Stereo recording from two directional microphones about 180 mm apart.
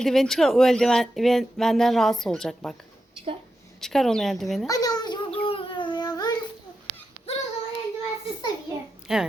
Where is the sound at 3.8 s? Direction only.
Centre (ahead or behind).